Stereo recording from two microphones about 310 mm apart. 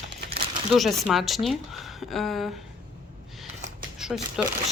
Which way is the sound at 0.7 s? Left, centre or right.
Centre.